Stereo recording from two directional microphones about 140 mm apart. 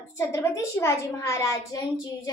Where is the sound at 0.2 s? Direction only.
20° left (ahead or behind).